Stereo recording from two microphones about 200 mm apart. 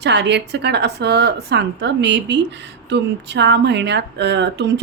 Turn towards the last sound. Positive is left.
turn(degrees=-60)  # may be behind; listen again after turning